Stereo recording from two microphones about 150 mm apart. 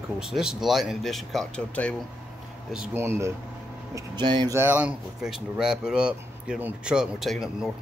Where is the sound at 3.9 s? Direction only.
30° right (ahead or behind).